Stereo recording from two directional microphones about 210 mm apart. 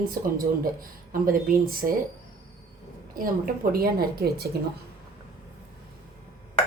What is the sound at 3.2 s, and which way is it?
A woman's voice, 45° right (ahead or behind).